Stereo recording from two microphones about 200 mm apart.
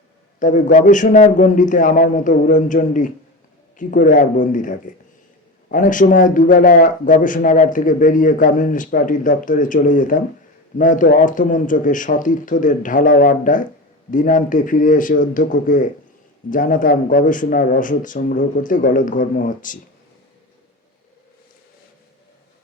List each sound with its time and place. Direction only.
0.3 s speech: 40° left (ahead or behind)